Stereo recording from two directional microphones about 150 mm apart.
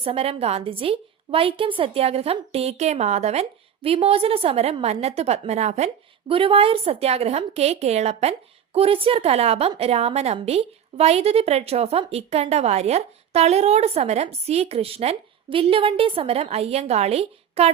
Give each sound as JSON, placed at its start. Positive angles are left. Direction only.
{"t": 0.0, "sound": "a woman's voice", "side_deg": -40}